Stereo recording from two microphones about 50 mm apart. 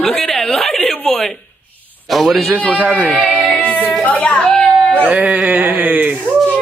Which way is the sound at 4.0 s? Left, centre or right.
Left.